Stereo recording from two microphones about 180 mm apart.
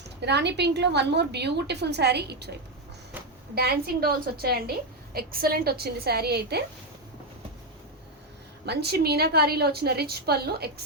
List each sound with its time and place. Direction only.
0.2 s a woman's voice: 70° right (ahead or behind)
8.6 s a woman's voice: 65° right (ahead or behind)